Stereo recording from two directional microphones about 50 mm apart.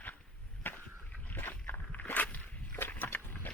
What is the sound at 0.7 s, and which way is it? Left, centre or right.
Rowboat, left.